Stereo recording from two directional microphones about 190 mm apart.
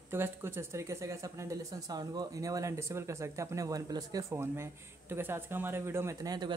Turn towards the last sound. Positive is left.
turn(degrees=-20)  # may be behind; listen again after turning